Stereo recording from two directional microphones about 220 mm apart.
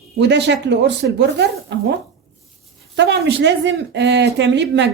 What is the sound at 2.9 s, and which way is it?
Speech, 50° right (ahead or behind).